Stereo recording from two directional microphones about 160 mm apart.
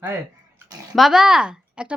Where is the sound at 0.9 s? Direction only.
Centre (ahead or behind).